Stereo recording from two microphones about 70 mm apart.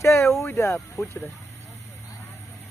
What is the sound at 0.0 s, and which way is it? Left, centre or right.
Speech, left.